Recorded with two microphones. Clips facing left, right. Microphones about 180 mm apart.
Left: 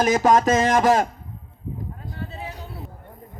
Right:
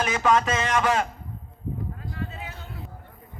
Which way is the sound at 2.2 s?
35° left (ahead or behind).